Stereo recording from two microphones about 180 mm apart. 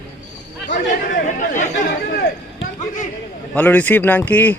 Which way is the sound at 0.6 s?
45° left (ahead or behind).